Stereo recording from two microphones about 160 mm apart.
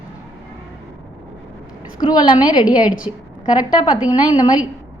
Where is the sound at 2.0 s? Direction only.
25° left (ahead or behind).